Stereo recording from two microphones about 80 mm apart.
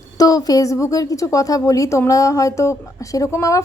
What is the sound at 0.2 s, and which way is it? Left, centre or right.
A woman's voice, left.